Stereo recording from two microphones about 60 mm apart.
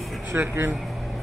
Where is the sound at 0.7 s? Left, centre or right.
Centre.